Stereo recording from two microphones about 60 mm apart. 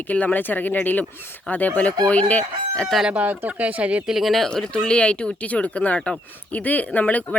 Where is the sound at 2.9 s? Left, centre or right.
Centre.